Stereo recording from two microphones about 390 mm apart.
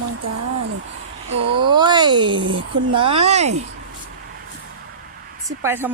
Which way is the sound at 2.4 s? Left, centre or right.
Right.